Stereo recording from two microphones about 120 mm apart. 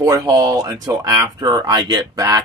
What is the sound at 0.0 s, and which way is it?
Speech, 30° right (ahead or behind).